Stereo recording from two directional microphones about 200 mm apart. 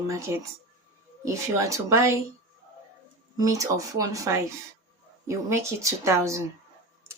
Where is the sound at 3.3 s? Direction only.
15° right (ahead or behind).